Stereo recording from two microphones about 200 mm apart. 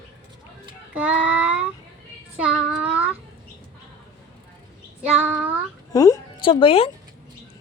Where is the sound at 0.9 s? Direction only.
5° right (ahead or behind).